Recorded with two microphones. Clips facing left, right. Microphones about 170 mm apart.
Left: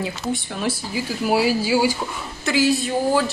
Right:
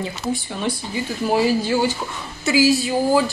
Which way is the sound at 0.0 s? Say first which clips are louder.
Even; centre (ahead or behind).